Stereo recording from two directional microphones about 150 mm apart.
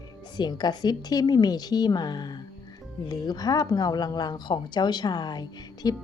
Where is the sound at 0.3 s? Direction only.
30° left (ahead or behind).